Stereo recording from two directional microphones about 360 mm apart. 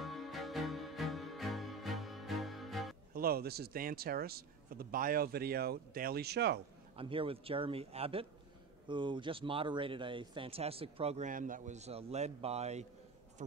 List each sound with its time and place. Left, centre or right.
0.0 s music: centre
3.2 s speech: right
7.0 s speech: centre